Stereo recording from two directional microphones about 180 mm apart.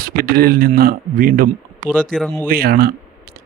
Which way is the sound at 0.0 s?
55° right (ahead or behind).